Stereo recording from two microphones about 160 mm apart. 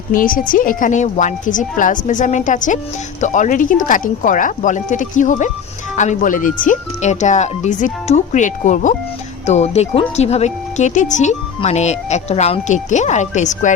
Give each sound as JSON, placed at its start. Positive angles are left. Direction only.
{"t": 0.1, "sound": "speech", "side_deg": 60}